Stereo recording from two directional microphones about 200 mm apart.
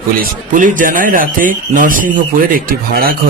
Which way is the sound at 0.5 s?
40° right (ahead or behind).